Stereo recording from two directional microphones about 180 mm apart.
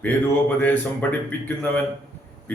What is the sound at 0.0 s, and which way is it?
Speech, 10° left (ahead or behind).